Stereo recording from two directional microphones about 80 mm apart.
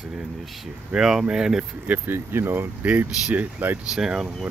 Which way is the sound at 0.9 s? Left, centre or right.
Centre.